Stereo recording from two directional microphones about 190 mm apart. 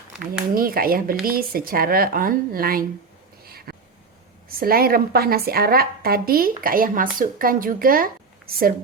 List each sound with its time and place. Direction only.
0.5 s speech: 50° right (ahead or behind)
3.4 s a sound: 50° right (ahead or behind)
4.6 s speech: 50° right (ahead or behind)